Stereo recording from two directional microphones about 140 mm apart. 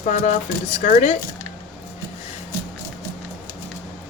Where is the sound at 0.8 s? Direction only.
65° left (ahead or behind).